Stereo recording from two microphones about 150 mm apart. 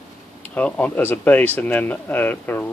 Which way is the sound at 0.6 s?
10° left (ahead or behind).